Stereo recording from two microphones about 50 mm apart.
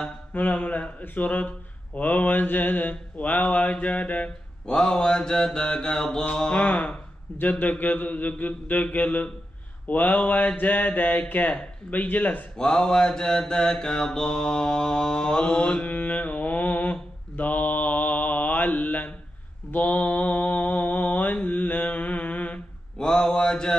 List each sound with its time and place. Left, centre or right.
0.3 s a man's voice: left
4.6 s mantra: centre
6.7 s a man's voice: left
12.5 s mantra: centre; by 22.6 s left
22.9 s mantra: centre